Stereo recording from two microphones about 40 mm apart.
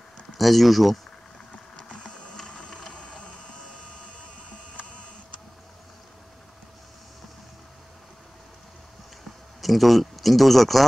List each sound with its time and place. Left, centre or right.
0.3 s speech: centre
1.5 s a sound: left
2.0 s printer: centre
2.5 s a sound: left
2.9 s printer: left
9.6 s speech: centre